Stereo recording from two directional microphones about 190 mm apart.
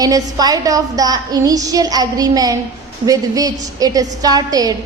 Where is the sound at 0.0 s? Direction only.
20° right (ahead or behind).